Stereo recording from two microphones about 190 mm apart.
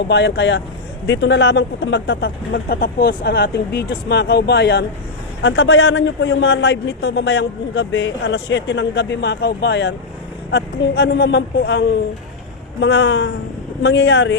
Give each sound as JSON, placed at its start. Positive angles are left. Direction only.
{"t": 0.1, "sound": "a man's voice", "side_deg": 65}
{"t": 5.4, "sound": "a man's voice", "side_deg": 85}